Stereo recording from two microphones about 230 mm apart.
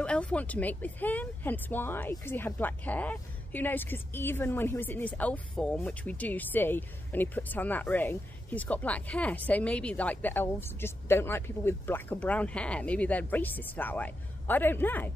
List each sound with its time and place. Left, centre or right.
0.0 s speech: centre